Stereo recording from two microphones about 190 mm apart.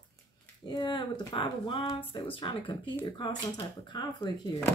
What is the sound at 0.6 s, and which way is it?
Speech, 25° left (ahead or behind).